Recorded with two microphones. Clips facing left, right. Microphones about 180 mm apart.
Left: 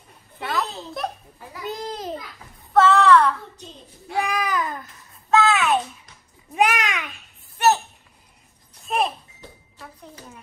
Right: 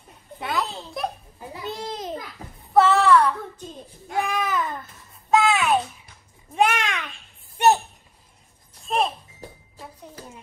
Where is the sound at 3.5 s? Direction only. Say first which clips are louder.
Right 4 dB; 50° right (ahead or behind).